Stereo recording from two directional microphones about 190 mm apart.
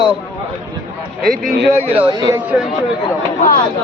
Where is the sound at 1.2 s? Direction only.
50° right (ahead or behind).